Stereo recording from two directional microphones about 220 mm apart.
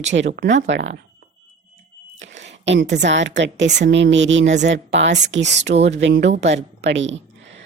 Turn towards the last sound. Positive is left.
turn(degrees=-55)  # may be behind; listen again after turning